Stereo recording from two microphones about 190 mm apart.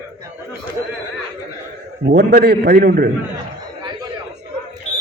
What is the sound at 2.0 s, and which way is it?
A man's voice, 60° right (ahead or behind).